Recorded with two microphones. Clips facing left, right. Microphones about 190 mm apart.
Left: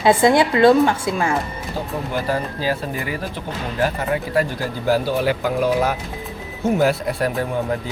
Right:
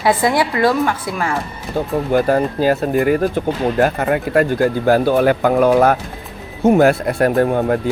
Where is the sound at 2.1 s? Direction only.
50° right (ahead or behind).